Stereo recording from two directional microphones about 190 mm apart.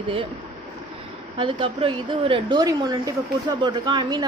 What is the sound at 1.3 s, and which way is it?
A woman's voice, 30° right (ahead or behind).